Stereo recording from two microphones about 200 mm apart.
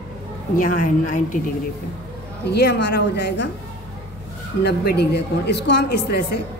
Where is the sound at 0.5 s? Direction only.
45° left (ahead or behind).